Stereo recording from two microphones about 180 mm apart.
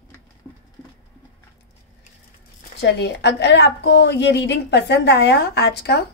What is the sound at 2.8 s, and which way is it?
Speech, 70° left (ahead or behind).